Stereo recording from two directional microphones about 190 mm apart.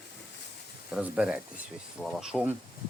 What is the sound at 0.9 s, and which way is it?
Speech, 5° right (ahead or behind).